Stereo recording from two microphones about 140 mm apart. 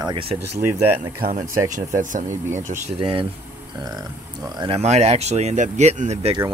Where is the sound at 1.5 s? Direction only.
65° right (ahead or behind).